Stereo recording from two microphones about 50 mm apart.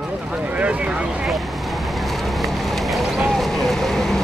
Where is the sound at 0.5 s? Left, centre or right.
Right.